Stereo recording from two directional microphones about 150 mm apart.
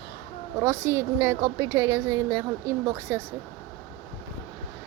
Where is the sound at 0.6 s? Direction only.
20° right (ahead or behind).